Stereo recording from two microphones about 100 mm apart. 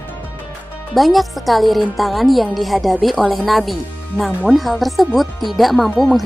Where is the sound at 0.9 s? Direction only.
Centre (ahead or behind).